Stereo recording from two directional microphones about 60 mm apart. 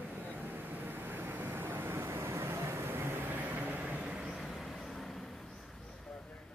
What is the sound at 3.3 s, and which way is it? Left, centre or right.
Vehicle, right.